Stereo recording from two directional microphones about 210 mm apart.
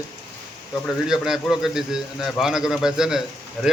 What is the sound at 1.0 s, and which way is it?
A man's voice, centre (ahead or behind).